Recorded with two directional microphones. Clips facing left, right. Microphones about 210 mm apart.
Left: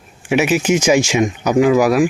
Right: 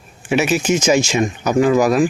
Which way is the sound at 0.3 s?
15° left (ahead or behind).